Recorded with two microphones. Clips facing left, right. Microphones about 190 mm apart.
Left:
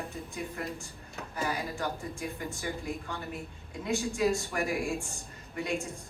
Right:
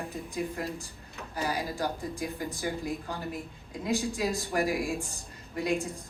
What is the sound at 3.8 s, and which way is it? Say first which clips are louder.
A woman's voice: left 1 dB; 35° right (ahead or behind).